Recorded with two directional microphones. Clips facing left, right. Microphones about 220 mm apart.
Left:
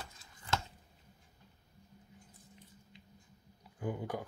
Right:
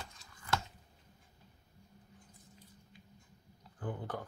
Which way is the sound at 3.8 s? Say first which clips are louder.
Left 3 dB; 10° left (ahead or behind).